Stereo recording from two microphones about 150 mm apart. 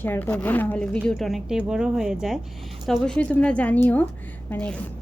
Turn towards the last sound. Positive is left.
turn(degrees=5)  # may be behind; listen again after turning